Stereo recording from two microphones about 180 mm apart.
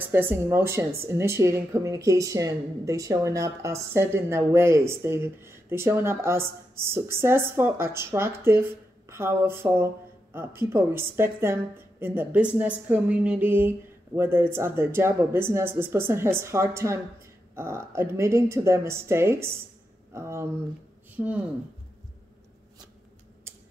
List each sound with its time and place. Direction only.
0.0 s speech: 10° right (ahead or behind)